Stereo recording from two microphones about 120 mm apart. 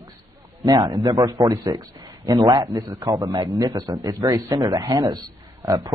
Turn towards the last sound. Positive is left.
turn(degrees=-30)  # may be behind; listen again after turning